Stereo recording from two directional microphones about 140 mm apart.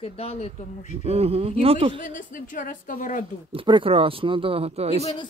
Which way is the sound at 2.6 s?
65° left (ahead or behind).